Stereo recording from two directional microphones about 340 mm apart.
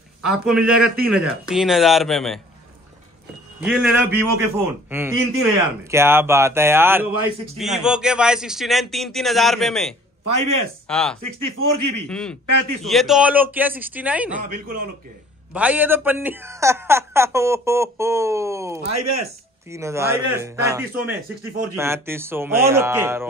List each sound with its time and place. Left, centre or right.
0.2 s speech: centre
3.6 s speech: centre
10.2 s speech: right
10.9 s speech: centre
11.1 s speech: right
12.1 s speech: centre
12.4 s speech: right
12.8 s speech: centre
14.4 s a man's voice: right
15.5 s speech: centre
18.9 s speech: right
19.7 s speech: centre